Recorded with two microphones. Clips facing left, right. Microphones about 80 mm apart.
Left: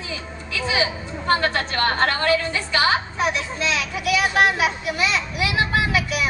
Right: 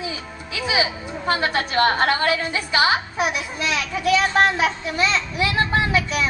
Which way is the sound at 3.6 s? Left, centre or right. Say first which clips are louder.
Even; left.